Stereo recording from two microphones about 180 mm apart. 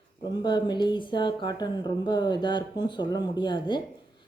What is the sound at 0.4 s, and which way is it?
A woman's voice, 25° left (ahead or behind).